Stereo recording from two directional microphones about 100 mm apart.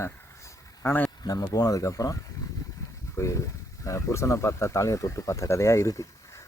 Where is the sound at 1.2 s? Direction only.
40° left (ahead or behind).